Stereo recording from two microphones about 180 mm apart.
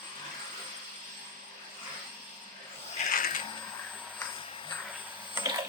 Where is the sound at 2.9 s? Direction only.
50° left (ahead or behind).